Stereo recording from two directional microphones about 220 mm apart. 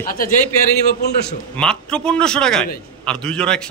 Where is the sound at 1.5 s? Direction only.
5° left (ahead or behind).